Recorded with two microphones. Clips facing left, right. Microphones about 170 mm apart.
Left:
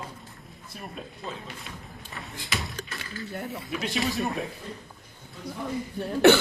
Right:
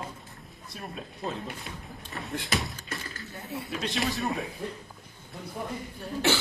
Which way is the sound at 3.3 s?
65° left (ahead or behind).